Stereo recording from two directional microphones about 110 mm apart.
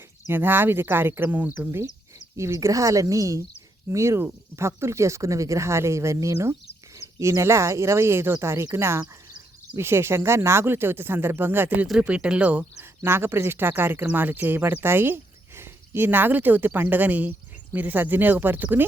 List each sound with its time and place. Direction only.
0.3 s speech: 20° right (ahead or behind)